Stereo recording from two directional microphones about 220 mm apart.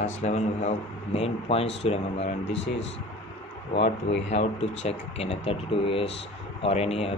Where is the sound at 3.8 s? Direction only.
25° left (ahead or behind).